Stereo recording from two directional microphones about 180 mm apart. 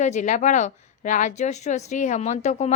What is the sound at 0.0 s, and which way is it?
A woman's voice, 40° left (ahead or behind).